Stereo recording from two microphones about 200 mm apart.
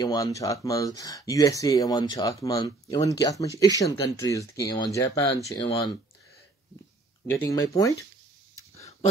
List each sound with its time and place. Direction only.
0.0 s speech: 20° left (ahead or behind)
7.2 s speech: 15° left (ahead or behind)